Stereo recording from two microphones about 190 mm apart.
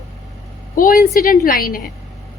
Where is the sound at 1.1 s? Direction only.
45° left (ahead or behind).